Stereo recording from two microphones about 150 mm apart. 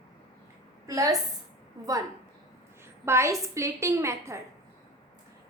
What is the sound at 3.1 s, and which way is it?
A woman's voice, 20° right (ahead or behind).